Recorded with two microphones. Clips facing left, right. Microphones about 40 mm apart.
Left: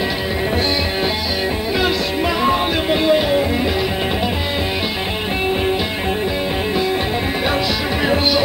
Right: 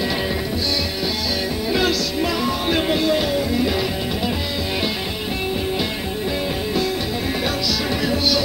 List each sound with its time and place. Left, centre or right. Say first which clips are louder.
1.7 s music: even; centre
8.0 s music: left 5 dB; left